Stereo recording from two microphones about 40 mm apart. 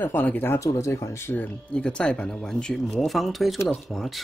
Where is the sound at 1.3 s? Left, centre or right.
Left.